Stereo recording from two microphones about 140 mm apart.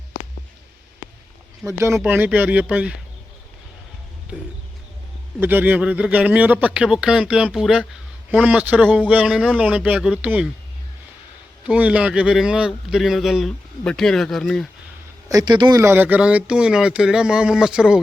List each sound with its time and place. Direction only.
1.6 s a man's voice: 20° right (ahead or behind)
4.3 s a sound: 10° right (ahead or behind)
5.4 s a man's voice: 15° right (ahead or behind)
11.6 s a man's voice: 10° right (ahead or behind)
15.3 s speech: 30° right (ahead or behind)
15.8 s a man's voice: 15° right (ahead or behind)